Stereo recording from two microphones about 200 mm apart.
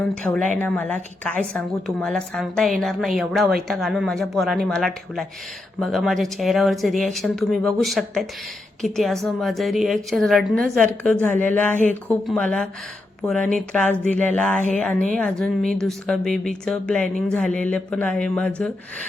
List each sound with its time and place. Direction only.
0.2 s a woman's voice: 5° left (ahead or behind)
14.1 s a sound: 5° left (ahead or behind)
14.7 s a woman's voice: 5° left (ahead or behind)